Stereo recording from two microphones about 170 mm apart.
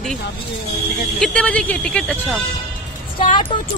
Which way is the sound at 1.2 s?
5° left (ahead or behind).